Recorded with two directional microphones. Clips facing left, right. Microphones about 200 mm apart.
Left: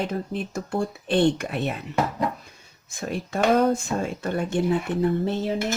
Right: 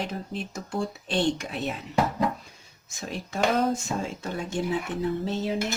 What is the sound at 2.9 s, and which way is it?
Speech, 55° left (ahead or behind).